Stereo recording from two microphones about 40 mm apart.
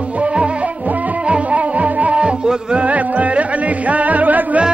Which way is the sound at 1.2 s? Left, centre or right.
Right.